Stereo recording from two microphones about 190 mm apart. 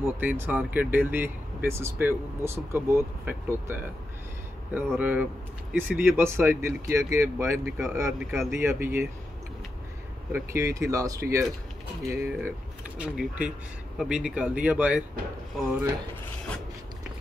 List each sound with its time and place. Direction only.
0.0 s speech: 10° right (ahead or behind)
8.2 s speech: 5° right (ahead or behind)
10.3 s speech: 15° right (ahead or behind)
12.2 s speech: 5° right (ahead or behind)